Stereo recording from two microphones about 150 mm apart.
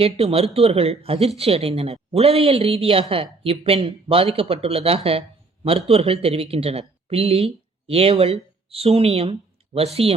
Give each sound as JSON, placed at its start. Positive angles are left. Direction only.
{"t": 0.0, "sound": "a woman's voice", "side_deg": -40}